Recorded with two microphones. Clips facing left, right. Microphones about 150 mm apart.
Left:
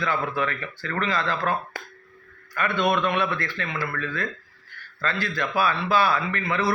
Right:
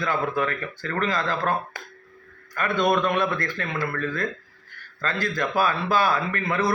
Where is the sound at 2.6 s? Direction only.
40° right (ahead or behind).